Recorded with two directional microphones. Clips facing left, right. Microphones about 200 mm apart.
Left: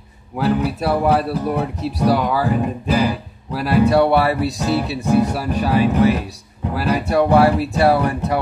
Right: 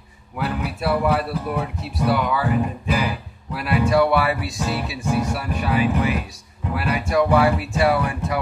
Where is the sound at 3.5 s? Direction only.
35° left (ahead or behind).